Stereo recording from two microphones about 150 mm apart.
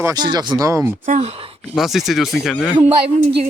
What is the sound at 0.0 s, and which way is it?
Speech, 25° right (ahead or behind).